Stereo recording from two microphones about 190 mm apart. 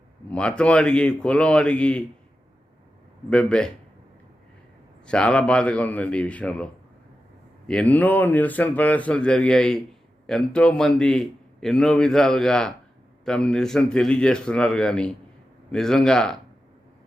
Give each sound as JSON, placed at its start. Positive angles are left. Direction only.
{"t": 0.3, "sound": "a man's voice", "side_deg": 5}
{"t": 3.2, "sound": "a man's voice", "side_deg": 5}
{"t": 5.0, "sound": "a man's voice", "side_deg": 5}
{"t": 7.7, "sound": "a man's voice", "side_deg": 5}